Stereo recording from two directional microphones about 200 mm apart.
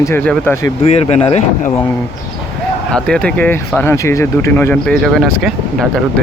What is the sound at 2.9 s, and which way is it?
Speech, 5° left (ahead or behind).